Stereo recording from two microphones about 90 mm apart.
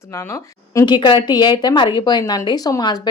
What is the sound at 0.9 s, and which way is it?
A woman's voice, 55° left (ahead or behind).